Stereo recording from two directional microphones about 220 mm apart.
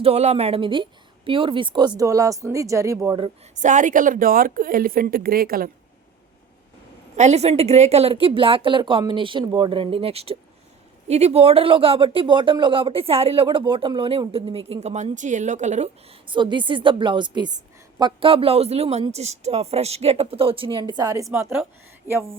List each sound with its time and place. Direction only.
0.0 s speech: 30° right (ahead or behind)
7.2 s speech: 30° right (ahead or behind); by 22.2 s 10° right (ahead or behind)